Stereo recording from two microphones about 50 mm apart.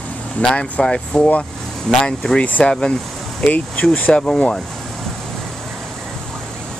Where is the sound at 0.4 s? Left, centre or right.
Centre.